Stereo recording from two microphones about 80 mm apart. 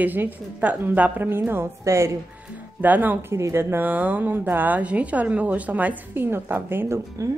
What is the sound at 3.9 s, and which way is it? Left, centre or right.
A woman's voice, centre.